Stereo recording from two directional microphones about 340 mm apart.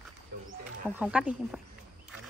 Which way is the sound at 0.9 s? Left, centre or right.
Centre.